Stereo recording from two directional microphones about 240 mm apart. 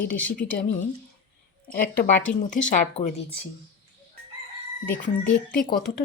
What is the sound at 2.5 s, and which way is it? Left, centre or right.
Speech, left.